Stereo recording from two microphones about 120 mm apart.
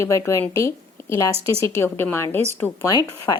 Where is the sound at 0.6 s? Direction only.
20° left (ahead or behind).